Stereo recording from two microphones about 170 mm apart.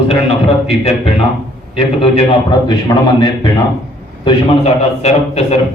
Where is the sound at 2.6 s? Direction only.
25° left (ahead or behind).